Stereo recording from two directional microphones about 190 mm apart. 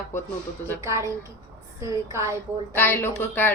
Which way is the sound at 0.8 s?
15° right (ahead or behind).